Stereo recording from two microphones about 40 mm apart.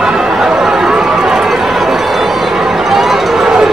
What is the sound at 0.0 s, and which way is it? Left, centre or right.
Chatter, centre.